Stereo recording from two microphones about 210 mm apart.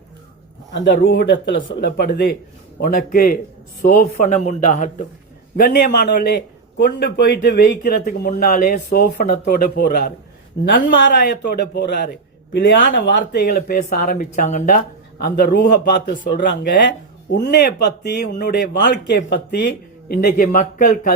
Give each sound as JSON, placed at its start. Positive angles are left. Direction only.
{"t": 0.7, "sound": "a man's voice", "side_deg": 55}
{"t": 5.5, "sound": "a man's voice", "side_deg": 50}
{"t": 13.6, "sound": "a man's voice", "side_deg": 40}